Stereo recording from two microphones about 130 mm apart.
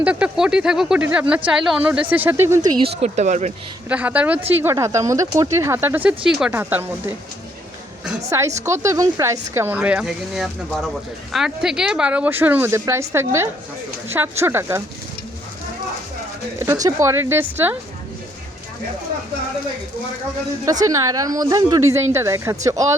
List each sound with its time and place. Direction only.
0.0 s speech: 10° right (ahead or behind)
2.8 s speech: 60° right (ahead or behind)
3.8 s speech: 10° right (ahead or behind)
8.3 s speech: 20° right (ahead or behind)
16.6 s speech: 25° right (ahead or behind)
20.7 s speech: 25° right (ahead or behind)